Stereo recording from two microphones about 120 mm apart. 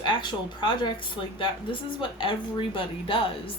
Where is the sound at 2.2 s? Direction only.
45° left (ahead or behind).